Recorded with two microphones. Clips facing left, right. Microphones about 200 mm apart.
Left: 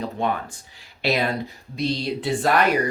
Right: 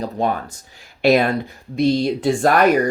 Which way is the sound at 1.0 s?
50° right (ahead or behind).